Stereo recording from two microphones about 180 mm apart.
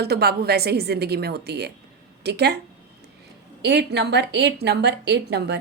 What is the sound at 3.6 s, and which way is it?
Speech, 70° right (ahead or behind).